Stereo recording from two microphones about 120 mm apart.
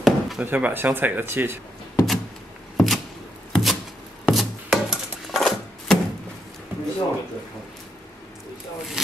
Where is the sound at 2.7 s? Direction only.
Centre (ahead or behind).